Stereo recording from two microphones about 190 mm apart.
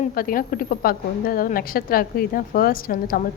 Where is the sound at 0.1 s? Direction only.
50° left (ahead or behind).